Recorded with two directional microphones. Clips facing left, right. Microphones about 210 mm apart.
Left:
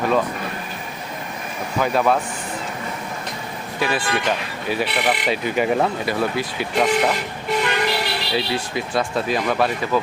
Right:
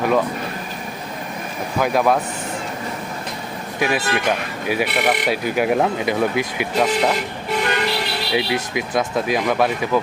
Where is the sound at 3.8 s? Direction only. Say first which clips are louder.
Right 2 dB; 15° right (ahead or behind).